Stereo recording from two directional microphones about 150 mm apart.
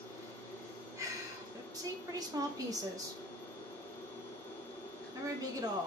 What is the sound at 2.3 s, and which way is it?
Speech, 25° right (ahead or behind).